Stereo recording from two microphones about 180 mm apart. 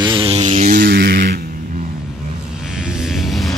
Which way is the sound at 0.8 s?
55° right (ahead or behind).